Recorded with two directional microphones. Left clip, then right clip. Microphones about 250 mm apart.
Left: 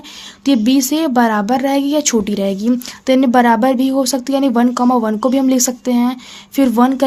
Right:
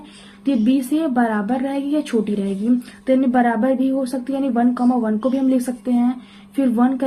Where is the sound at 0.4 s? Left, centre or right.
Left.